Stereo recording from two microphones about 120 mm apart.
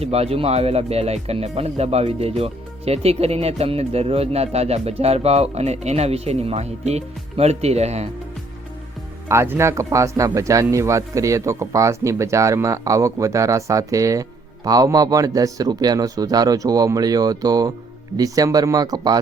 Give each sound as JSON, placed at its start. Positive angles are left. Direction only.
{"t": 0.0, "sound": "speech", "side_deg": -60}
{"t": 9.3, "sound": "speech", "side_deg": -20}